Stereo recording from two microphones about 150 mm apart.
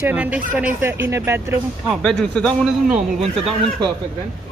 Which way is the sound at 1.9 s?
5° left (ahead or behind).